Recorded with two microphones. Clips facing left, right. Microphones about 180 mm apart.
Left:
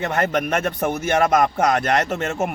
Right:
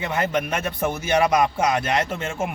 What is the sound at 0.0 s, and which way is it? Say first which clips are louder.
Speech: left 2 dB; 55° left (ahead or behind).